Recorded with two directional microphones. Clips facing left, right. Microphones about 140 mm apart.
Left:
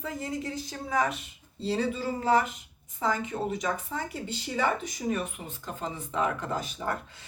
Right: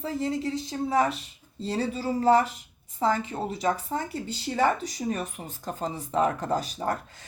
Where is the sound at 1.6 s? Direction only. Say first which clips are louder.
Even; 40° right (ahead or behind).